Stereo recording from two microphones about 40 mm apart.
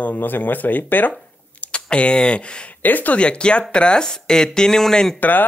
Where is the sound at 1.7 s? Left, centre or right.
Left.